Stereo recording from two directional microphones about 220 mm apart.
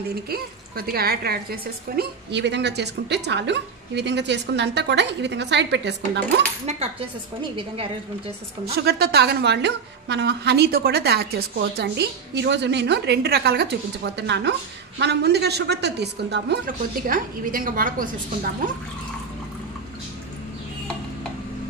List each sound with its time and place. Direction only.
0.1 s a woman's voice: 45° right (ahead or behind)
6.6 s speech: 30° right (ahead or behind)
8.7 s a woman's voice: 45° right (ahead or behind)